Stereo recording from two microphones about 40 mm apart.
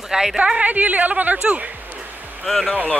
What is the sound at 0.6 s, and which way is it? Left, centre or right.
Speech, right.